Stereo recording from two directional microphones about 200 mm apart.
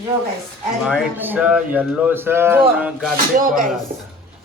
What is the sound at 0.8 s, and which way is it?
A man's voice, 5° right (ahead or behind).